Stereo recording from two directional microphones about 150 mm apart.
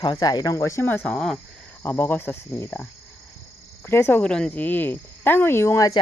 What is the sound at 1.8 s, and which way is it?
Cricket, 15° left (ahead or behind).